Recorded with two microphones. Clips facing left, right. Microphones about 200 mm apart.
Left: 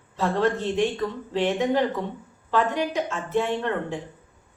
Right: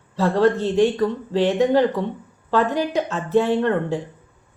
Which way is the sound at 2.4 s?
35° right (ahead or behind).